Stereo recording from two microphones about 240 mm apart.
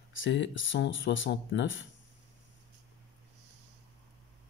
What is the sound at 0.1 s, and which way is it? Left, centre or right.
Speech, left.